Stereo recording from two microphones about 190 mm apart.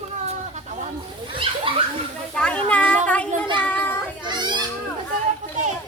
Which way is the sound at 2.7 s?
5° left (ahead or behind).